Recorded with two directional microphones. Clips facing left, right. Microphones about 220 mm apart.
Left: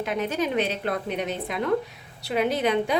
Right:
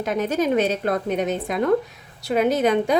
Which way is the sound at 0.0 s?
45° right (ahead or behind).